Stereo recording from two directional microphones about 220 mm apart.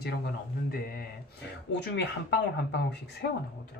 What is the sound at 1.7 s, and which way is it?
Speech, 50° left (ahead or behind).